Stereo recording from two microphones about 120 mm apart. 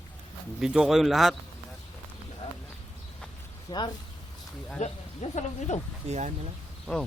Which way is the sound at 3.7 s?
35° left (ahead or behind).